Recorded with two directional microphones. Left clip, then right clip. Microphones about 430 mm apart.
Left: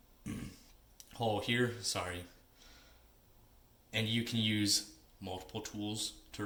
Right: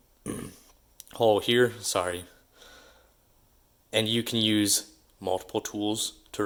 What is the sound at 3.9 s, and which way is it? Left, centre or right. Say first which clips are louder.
Speech: right 10 dB; centre.